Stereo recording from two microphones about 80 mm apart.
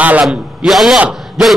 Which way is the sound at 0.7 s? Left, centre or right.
Centre.